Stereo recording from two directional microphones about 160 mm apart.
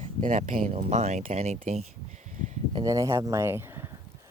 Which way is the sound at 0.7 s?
40° right (ahead or behind).